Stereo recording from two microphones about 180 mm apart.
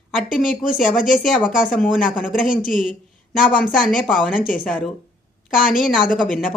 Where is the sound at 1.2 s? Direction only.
Centre (ahead or behind).